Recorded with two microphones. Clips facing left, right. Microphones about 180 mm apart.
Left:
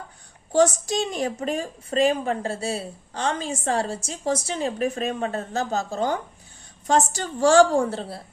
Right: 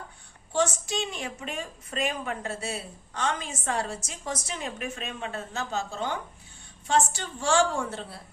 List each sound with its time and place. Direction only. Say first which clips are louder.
0.5 s a woman's voice: left 7 dB; 40° left (ahead or behind)